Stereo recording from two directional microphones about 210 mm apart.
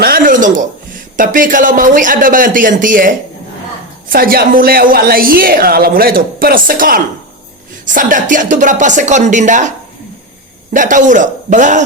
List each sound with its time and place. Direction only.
0.0 s a sound: 40° right (ahead or behind)
1.1 s speech: 40° right (ahead or behind)
4.1 s a woman's voice: 45° right (ahead or behind)